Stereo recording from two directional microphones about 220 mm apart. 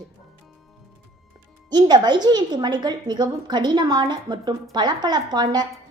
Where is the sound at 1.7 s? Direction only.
20° right (ahead or behind).